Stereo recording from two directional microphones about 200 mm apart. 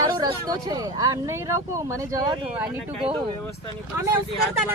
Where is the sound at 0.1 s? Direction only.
20° right (ahead or behind).